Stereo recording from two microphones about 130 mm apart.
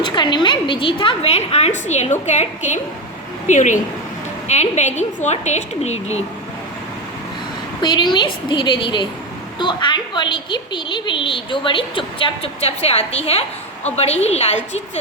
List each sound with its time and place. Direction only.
0.0 s a woman's voice: 35° left (ahead or behind); by 3.8 s 70° left (ahead or behind)
4.4 s a woman's voice: 60° left (ahead or behind)
7.8 s a woman's voice: 35° left (ahead or behind); by 14.8 s 60° left (ahead or behind)